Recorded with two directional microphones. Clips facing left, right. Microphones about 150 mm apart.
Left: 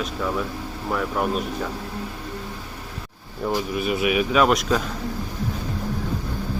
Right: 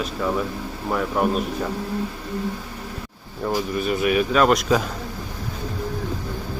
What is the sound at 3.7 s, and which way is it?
Speech, 5° left (ahead or behind).